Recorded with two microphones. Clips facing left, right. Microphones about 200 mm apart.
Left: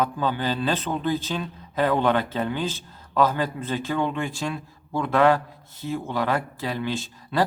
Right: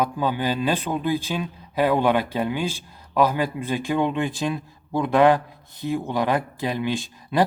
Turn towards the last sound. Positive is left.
turn(degrees=-15)  # may be behind; listen again after turning